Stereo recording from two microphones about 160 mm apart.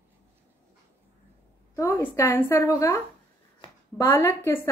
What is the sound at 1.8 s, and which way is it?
A woman's voice, 15° left (ahead or behind).